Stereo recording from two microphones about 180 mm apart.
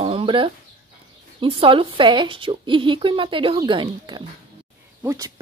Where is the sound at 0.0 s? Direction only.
30° right (ahead or behind).